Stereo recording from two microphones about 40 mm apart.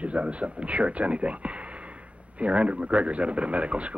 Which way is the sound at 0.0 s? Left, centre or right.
Right.